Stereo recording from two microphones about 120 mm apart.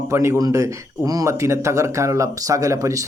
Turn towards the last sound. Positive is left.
turn(degrees=-25)  # may be behind; listen again after turning